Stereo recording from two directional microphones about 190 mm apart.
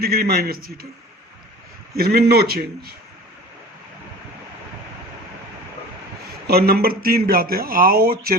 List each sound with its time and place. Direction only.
0.0 s speech: 55° right (ahead or behind)
1.9 s speech: 55° right (ahead or behind)
6.5 s speech: 55° right (ahead or behind)